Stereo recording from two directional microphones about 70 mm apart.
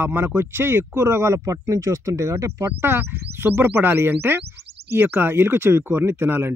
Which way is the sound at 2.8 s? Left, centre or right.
Right.